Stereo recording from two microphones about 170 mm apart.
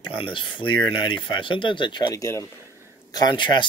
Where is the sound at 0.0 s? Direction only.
30° left (ahead or behind).